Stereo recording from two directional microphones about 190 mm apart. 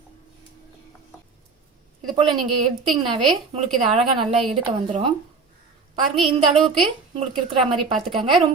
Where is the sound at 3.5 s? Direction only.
30° right (ahead or behind).